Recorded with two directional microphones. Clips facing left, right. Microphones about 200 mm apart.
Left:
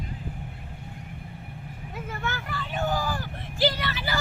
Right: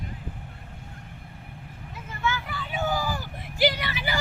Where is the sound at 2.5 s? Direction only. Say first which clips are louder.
Even; centre (ahead or behind).